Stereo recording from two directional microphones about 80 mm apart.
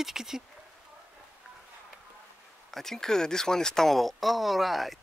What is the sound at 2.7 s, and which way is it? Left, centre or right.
Speech, centre.